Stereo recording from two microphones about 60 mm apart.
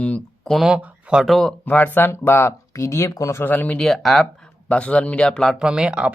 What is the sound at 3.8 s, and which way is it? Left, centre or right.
Speech, centre.